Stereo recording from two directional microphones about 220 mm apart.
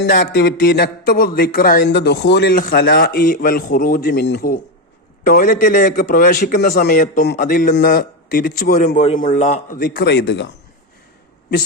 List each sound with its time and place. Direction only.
0.0 s a man's voice: 45° left (ahead or behind)